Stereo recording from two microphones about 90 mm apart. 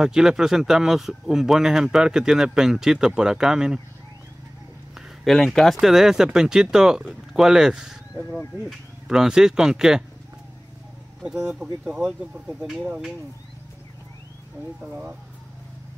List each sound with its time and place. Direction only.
0.0 s speech: 5° right (ahead or behind)
4.9 s speech: centre (ahead or behind)
11.4 s speech: 10° right (ahead or behind)
14.9 s speech: 20° right (ahead or behind)